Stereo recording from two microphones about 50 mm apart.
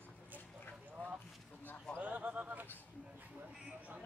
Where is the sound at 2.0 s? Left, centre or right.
Right.